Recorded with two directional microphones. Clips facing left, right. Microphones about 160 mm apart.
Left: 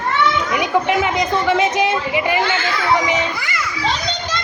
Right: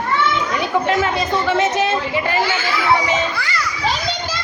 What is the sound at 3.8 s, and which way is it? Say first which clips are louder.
Children playing: even; 5° right (ahead or behind).